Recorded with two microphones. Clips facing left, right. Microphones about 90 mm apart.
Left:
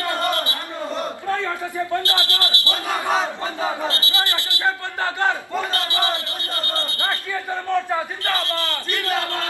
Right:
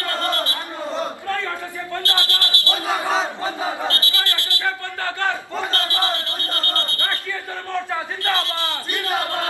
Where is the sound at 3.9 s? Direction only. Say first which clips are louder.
Left 1 dB; 20° left (ahead or behind).